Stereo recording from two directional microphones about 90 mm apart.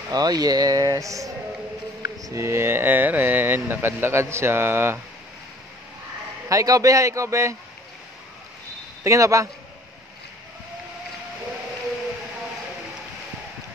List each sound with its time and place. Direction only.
0.1 s speech: 45° right (ahead or behind); by 4.9 s 25° right (ahead or behind)
6.5 s a man's voice: 40° right (ahead or behind)
9.0 s a man's voice: 35° right (ahead or behind)